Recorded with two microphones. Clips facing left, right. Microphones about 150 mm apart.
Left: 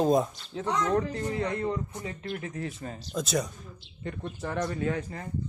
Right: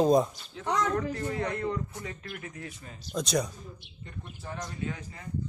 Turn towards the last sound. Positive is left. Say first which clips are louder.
# left 7 dB
turn(degrees=60)  # may be behind; listen again after turning